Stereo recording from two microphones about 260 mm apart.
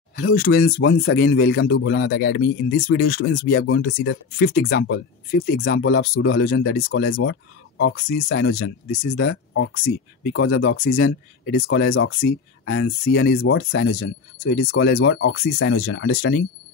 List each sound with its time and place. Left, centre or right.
0.1 s speech: left
7.2 s speech: left
9.1 s speech: left
11.6 s speech: left
13.4 s speech: left